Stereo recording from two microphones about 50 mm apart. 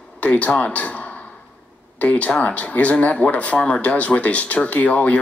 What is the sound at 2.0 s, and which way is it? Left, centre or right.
Speech, left.